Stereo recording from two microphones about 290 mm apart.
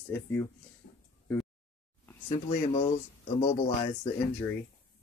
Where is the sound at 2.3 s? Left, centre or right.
Left.